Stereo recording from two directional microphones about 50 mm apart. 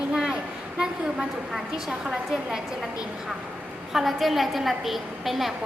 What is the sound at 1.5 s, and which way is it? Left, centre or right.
A woman's voice, centre.